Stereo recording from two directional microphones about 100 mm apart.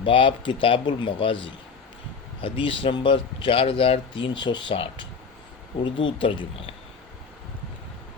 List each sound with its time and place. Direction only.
0.0 s speech: 60° left (ahead or behind)